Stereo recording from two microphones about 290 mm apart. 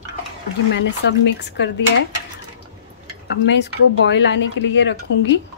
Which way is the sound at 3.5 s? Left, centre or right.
Left.